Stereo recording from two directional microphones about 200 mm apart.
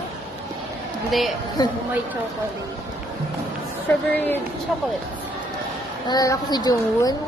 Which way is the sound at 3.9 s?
10° left (ahead or behind).